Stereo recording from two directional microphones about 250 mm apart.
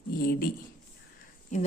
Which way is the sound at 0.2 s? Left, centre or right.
Left.